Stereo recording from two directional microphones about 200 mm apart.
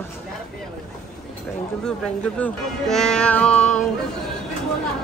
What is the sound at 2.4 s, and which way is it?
Speech, centre (ahead or behind).